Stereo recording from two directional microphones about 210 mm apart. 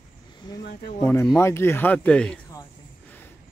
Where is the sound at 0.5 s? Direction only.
20° left (ahead or behind).